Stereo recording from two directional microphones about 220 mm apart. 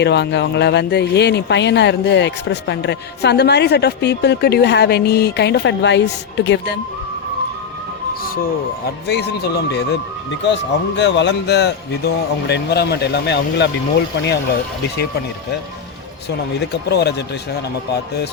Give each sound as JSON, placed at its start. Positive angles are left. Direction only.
{"t": 0.0, "sound": "speech", "side_deg": 50}
{"t": 9.0, "sound": "speech", "side_deg": 50}
{"t": 16.6, "sound": "speech", "side_deg": 50}